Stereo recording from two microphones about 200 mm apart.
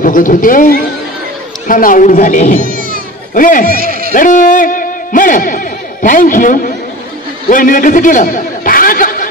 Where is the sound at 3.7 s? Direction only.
50° right (ahead or behind).